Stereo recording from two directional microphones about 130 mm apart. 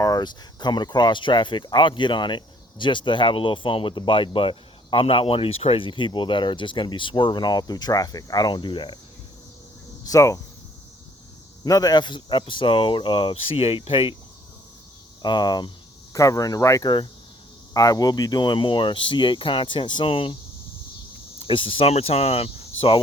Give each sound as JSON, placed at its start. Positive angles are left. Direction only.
{"t": 0.0, "sound": "speech", "side_deg": 30}
{"t": 10.0, "sound": "speech", "side_deg": 25}
{"t": 11.6, "sound": "speech", "side_deg": 30}
{"t": 15.2, "sound": "speech", "side_deg": 35}
{"t": 21.4, "sound": "cricket", "side_deg": 45}